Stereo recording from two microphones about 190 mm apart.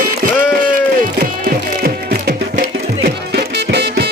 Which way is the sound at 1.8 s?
50° right (ahead or behind).